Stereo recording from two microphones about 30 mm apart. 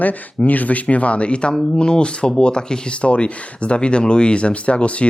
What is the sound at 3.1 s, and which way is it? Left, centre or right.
Speech, left.